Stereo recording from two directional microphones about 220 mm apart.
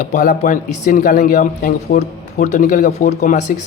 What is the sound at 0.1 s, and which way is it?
Speech, 35° left (ahead or behind).